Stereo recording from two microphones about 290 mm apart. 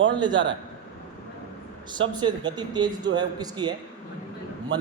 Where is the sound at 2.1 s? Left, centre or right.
Centre.